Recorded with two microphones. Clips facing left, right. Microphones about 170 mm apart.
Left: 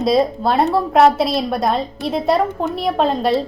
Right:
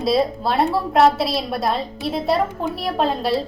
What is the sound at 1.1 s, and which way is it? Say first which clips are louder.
A woman's voice: left 4 dB; centre (ahead or behind).